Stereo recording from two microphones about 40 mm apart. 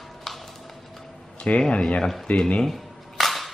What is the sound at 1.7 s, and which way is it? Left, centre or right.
Speech, left.